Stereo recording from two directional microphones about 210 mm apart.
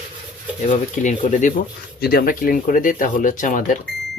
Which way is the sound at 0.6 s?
35° left (ahead or behind).